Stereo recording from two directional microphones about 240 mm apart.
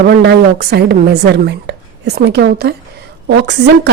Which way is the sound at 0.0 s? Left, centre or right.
Right.